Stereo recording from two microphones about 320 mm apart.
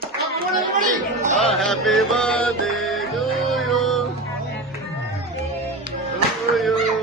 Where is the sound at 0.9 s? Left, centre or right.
Right.